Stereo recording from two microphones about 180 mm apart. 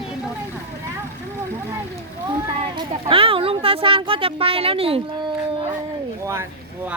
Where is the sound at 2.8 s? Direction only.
30° right (ahead or behind).